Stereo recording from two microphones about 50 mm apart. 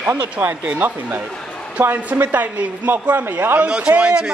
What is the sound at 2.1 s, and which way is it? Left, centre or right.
Speech, right.